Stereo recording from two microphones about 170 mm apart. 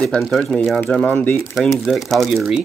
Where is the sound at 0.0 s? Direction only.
Centre (ahead or behind).